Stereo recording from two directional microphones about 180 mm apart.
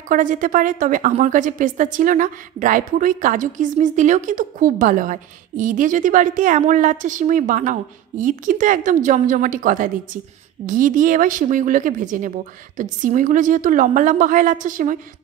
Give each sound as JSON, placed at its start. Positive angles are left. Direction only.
{"t": 0.1, "sound": "a woman's voice", "side_deg": -45}